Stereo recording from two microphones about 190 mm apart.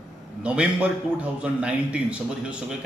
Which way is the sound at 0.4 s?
5° right (ahead or behind).